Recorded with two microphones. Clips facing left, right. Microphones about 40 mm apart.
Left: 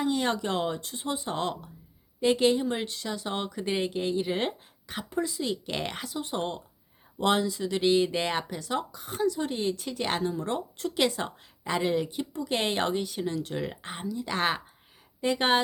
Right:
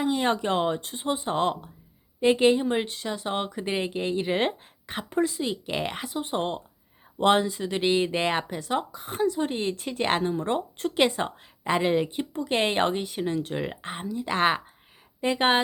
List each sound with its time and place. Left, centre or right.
0.0 s speech: right
5.4 s speech: right